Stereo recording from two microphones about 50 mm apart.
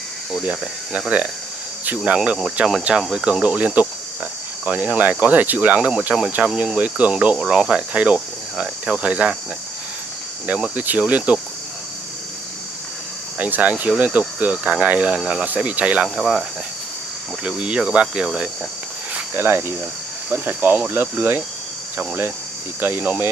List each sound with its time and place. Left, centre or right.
0.5 s cricket: right
2.6 s cricket: right
4.6 s speech: right
6.4 s cricket: right
7.3 s cricket: centre
10.8 s speech: right
13.4 s speech: right
15.1 s speech: centre
15.4 s cricket: right
16.2 s cricket: centre
17.4 s cricket: centre
19.3 s speech: right
20.4 s speech: right